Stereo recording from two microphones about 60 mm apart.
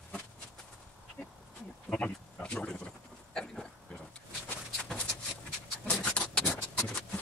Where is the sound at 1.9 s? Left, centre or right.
Centre.